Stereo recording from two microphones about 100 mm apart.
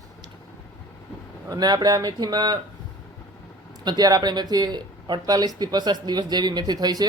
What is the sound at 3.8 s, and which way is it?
Speech, 45° right (ahead or behind).